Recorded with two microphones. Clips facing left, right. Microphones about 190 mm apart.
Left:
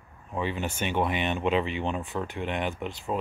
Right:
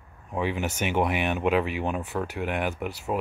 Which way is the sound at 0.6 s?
10° right (ahead or behind).